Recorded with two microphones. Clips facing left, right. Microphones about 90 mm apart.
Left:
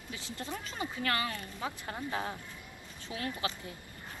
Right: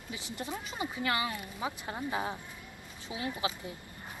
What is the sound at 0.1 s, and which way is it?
Speech, 15° right (ahead or behind).